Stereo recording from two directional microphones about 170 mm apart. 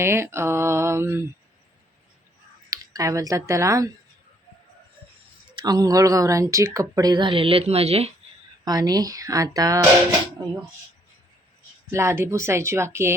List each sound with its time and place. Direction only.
0.0 s speech: 15° right (ahead or behind)
2.6 s speech: 20° right (ahead or behind)
5.5 s speech: 25° right (ahead or behind)
8.6 s speech: 20° right (ahead or behind)
11.9 s speech: 15° right (ahead or behind)